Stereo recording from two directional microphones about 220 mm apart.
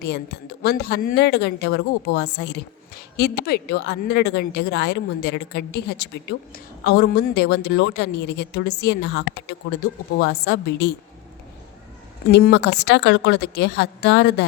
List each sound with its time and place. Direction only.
0.0 s a woman's voice: 45° left (ahead or behind)
12.3 s a woman's voice: 50° left (ahead or behind)